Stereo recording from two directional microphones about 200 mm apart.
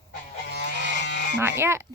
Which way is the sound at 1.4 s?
10° right (ahead or behind).